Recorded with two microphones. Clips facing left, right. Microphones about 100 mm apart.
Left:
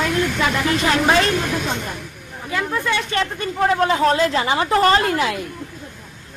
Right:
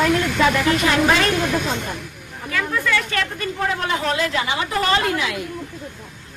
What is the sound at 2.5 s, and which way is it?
Speech, 25° left (ahead or behind).